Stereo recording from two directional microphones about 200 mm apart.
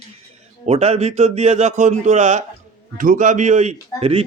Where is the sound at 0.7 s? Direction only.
30° right (ahead or behind).